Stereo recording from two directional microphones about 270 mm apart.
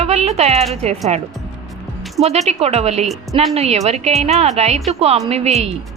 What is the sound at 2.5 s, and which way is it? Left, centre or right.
A woman's voice, right.